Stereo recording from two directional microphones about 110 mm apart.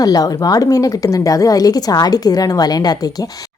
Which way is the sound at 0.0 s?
35° left (ahead or behind).